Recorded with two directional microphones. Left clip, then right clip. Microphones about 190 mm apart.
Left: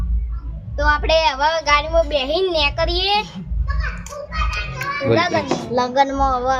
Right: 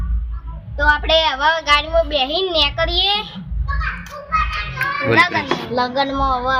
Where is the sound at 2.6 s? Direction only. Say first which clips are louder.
Right 2 dB; 50° left (ahead or behind).